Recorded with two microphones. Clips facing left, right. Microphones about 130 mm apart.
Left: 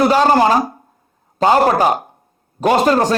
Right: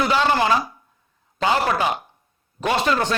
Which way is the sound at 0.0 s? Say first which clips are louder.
Left 7 dB; 40° left (ahead or behind).